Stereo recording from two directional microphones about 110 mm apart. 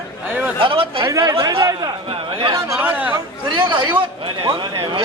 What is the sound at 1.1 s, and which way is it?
Speech, 30° right (ahead or behind).